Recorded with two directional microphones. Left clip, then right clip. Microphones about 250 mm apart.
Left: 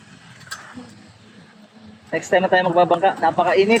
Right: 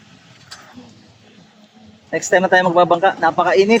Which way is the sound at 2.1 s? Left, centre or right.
Right.